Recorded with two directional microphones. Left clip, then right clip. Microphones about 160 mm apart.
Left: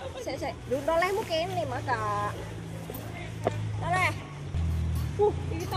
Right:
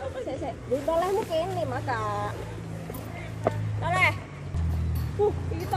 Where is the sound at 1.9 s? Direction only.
20° right (ahead or behind).